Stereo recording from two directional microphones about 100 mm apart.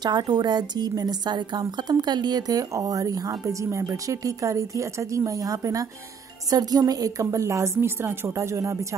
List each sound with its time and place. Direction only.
0.0 s a woman's voice: 45° right (ahead or behind); by 8.7 s 30° right (ahead or behind)